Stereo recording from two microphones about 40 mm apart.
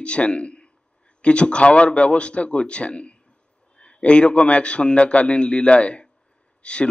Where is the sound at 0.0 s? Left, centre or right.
Left.